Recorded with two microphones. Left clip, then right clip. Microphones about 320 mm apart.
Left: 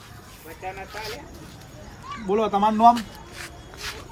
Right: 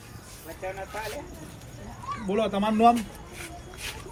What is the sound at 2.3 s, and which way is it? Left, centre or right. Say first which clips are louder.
Speech: left 6 dB; centre.